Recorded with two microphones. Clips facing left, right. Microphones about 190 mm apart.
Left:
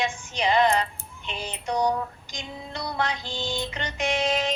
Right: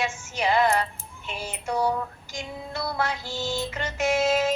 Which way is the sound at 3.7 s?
5° right (ahead or behind).